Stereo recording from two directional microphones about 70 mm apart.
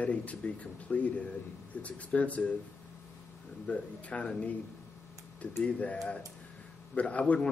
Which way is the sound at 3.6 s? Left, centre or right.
Centre.